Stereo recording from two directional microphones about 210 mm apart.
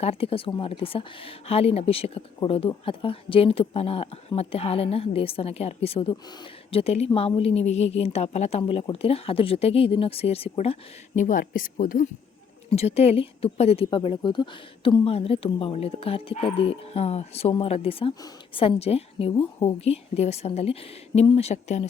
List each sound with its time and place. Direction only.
0.0 s speech: 30° left (ahead or behind)
12.7 s speech: 30° left (ahead or behind)